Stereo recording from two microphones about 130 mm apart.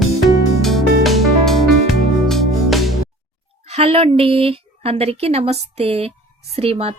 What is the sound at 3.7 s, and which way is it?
A woman's voice, 45° right (ahead or behind).